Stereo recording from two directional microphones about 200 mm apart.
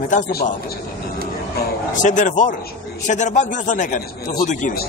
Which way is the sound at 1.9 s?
40° left (ahead or behind).